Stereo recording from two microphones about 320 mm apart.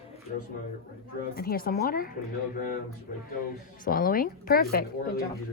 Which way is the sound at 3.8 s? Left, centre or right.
Left.